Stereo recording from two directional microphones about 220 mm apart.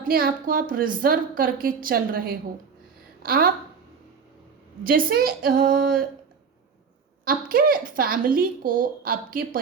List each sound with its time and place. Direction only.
0.0 s a woman's voice: 40° right (ahead or behind)
4.8 s a woman's voice: 40° right (ahead or behind)
7.3 s a woman's voice: 40° right (ahead or behind)